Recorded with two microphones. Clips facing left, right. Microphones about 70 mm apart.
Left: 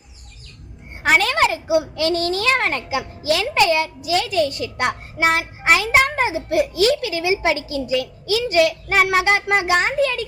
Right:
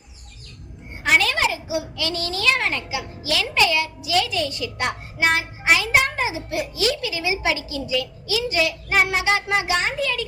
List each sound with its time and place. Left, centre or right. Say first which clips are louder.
1.0 s a child's voice: left 3 dB; left